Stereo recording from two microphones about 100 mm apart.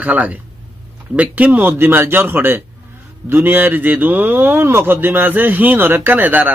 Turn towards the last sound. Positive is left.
turn(degrees=-15)  # may be behind; listen again after turning